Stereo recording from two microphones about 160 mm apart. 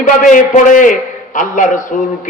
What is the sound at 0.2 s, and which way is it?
A man's voice, 55° left (ahead or behind).